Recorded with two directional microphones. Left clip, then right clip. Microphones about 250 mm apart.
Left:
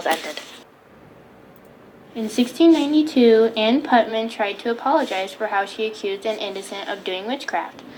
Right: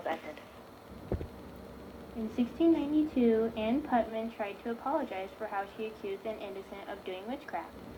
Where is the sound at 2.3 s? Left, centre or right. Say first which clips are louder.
Left 13 dB; left.